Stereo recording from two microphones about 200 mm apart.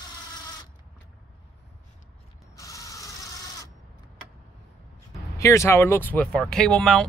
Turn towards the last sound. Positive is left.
turn(degrees=0)  # may be behind; listen again after turning